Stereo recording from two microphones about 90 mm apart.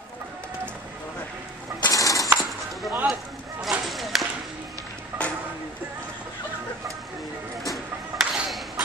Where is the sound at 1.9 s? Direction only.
40° left (ahead or behind).